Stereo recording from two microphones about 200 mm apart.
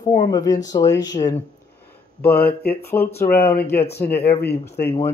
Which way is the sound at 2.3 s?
50° left (ahead or behind).